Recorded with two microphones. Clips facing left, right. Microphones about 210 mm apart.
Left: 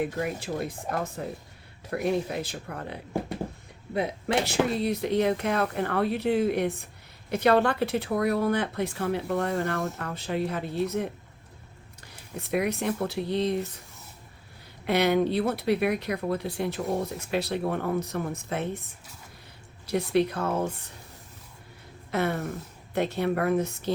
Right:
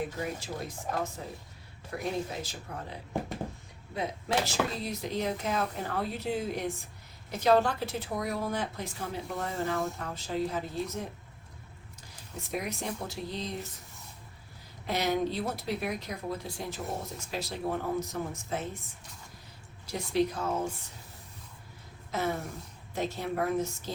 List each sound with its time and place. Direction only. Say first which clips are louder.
0.0 s speech: left 5 dB; 60° left (ahead or behind)
4.8 s speech: left 8 dB; 65° left (ahead or behind)
14.8 s speech: left 6 dB; 65° left (ahead or behind)
19.9 s speech: left 4 dB; 60° left (ahead or behind)
22.1 s speech: left 5 dB; 65° left (ahead or behind)